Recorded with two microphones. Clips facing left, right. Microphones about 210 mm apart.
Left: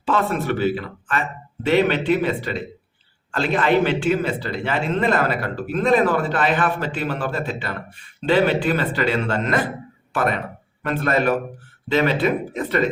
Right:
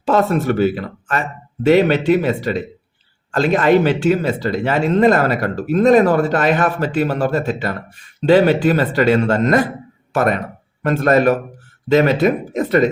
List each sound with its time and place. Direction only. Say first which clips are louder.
0.0 s a man's voice: right 6 dB; 40° right (ahead or behind)